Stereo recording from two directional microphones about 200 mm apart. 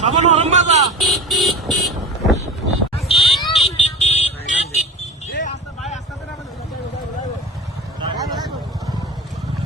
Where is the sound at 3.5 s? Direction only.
30° left (ahead or behind).